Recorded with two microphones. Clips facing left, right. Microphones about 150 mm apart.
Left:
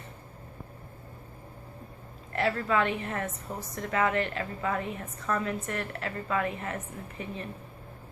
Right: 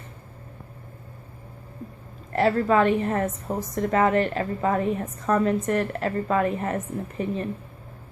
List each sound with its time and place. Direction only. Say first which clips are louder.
2.3 s a woman's voice: right 7 dB; 40° right (ahead or behind)